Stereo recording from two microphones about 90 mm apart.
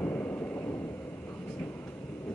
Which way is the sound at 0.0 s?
20° left (ahead or behind).